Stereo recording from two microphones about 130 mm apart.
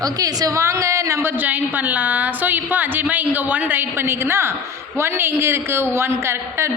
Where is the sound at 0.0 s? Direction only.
30° right (ahead or behind).